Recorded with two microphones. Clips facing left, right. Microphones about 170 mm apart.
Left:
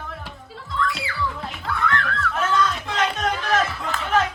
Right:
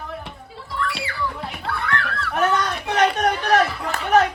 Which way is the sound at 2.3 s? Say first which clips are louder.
Right 2 dB; 65° right (ahead or behind).